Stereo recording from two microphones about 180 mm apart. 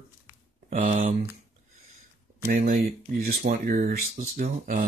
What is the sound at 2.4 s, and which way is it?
Speech, 50° right (ahead or behind).